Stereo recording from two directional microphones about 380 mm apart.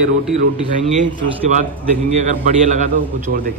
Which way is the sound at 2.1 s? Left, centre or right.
Centre.